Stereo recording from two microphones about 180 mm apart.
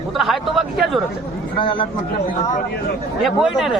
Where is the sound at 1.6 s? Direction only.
25° left (ahead or behind).